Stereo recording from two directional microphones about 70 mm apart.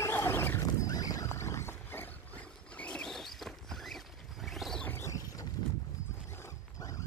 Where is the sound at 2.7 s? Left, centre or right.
Centre.